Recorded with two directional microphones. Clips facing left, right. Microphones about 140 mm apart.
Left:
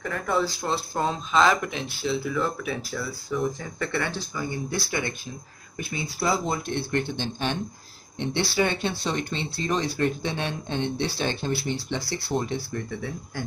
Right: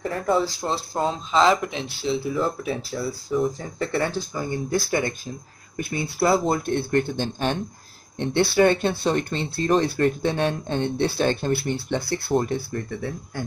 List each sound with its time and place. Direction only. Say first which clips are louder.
0.9 s speech: right 2 dB; 25° right (ahead or behind); by 5.3 s 40° right (ahead or behind)
5.9 s speech: right 5 dB; 60° right (ahead or behind)